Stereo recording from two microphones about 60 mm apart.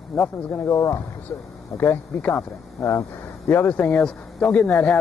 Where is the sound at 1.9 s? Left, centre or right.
Left.